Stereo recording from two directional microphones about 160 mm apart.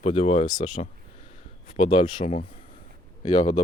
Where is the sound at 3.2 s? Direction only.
25° left (ahead or behind).